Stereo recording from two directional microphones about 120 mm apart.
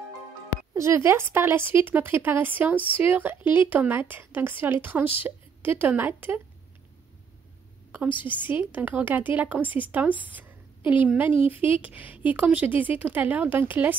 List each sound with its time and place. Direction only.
0.7 s a woman's voice: 25° right (ahead or behind)
8.2 s a woman's voice: 15° right (ahead or behind)